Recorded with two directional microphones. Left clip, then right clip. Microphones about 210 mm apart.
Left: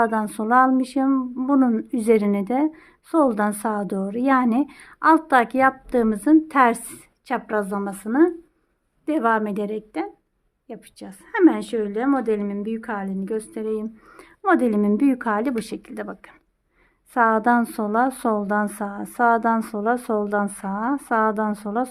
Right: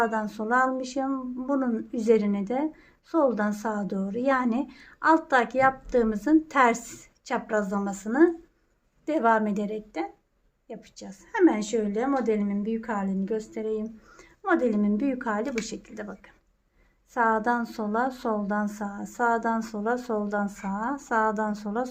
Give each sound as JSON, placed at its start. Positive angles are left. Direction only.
{"t": 0.0, "sound": "a woman's voice", "side_deg": 30}